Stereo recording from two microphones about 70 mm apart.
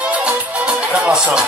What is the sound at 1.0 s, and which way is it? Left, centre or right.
Speech, centre.